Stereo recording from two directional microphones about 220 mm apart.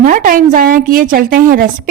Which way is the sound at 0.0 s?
35° right (ahead or behind).